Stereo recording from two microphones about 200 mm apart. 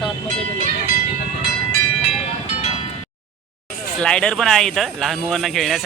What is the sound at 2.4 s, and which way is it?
Music, 30° left (ahead or behind).